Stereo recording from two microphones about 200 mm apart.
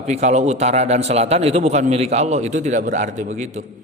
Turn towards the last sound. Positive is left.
turn(degrees=-40)  # may be behind; listen again after turning